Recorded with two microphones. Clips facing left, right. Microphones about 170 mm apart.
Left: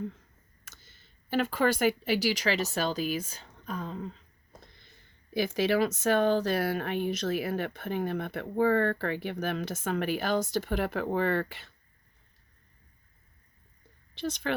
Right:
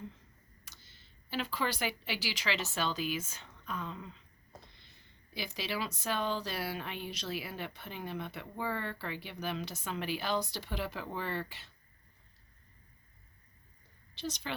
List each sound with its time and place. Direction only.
0.6 s speech: 50° left (ahead or behind)
5.3 s speech: 50° left (ahead or behind)
14.2 s speech: 55° left (ahead or behind)